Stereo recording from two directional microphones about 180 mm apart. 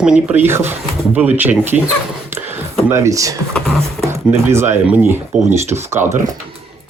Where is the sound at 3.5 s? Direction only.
Centre (ahead or behind).